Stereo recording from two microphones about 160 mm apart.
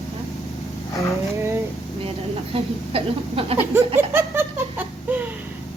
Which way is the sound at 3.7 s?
15° right (ahead or behind).